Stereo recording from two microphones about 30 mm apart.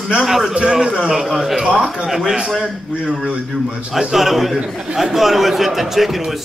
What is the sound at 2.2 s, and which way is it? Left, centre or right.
Speech, right.